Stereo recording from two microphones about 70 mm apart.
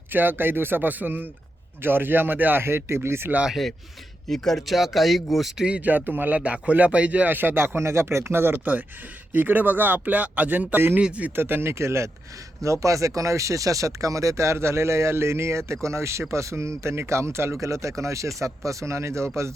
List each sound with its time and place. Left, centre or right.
0.1 s speech: right
3.5 s speech: centre
5.7 s speech: right
11.3 s speech: right